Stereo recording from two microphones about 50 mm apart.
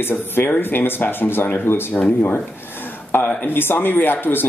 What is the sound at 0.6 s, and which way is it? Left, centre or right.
Speech, left.